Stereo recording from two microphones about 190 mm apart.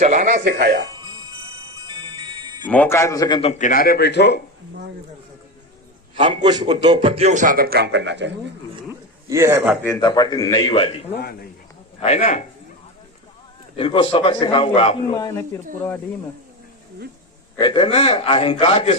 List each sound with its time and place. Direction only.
0.0 s speech: 40° right (ahead or behind)
0.9 s music: 20° right (ahead or behind)
2.6 s a man's voice: 10° left (ahead or behind)
3.5 s a man's voice: 45° left (ahead or behind); by 4.4 s 65° left (ahead or behind)
6.1 s a man's voice: 25° right (ahead or behind); by 8.4 s 65° right (ahead or behind)
8.9 s a sound: 15° right (ahead or behind)
9.8 s a man's voice: 20° left (ahead or behind); by 12.4 s 40° left (ahead or behind)
13.7 s a man's voice: 30° left (ahead or behind)
17.6 s a man's voice: 25° left (ahead or behind)